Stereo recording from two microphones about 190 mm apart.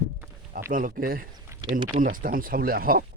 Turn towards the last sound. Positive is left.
turn(degrees=-50)  # may be behind; listen again after turning